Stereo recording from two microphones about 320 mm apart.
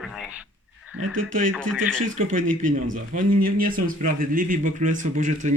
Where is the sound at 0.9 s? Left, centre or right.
Right.